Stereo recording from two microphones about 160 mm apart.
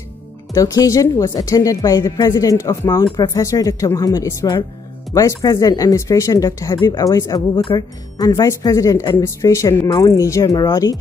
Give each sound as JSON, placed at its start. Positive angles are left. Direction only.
{"t": 0.6, "sound": "speech", "side_deg": 20}